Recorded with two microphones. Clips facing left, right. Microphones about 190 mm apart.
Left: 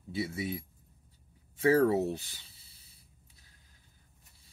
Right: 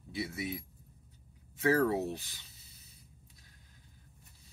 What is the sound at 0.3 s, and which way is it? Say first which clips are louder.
Speech: left 2 dB; 30° left (ahead or behind).